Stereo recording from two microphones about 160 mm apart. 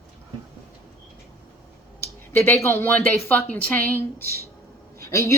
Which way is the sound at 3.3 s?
10° left (ahead or behind).